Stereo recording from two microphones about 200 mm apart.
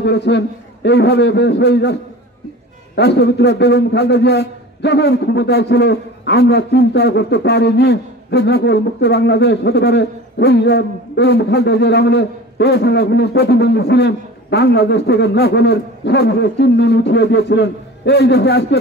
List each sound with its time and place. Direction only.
0.0 s a man's voice: 60° left (ahead or behind)
3.0 s a man's voice: 55° left (ahead or behind)